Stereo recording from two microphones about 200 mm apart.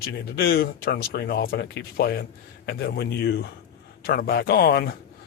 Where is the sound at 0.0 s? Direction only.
50° left (ahead or behind).